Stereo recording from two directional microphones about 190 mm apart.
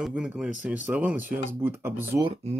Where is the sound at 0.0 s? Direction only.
5° right (ahead or behind).